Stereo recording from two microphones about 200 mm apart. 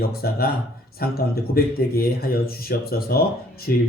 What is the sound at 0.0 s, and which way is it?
Speech, 50° left (ahead or behind).